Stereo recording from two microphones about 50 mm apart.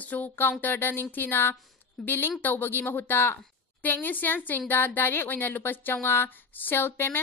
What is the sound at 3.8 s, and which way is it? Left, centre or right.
A woman's voice, left.